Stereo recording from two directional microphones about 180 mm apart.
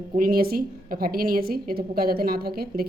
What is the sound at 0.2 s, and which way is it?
A woman's voice, 55° right (ahead or behind).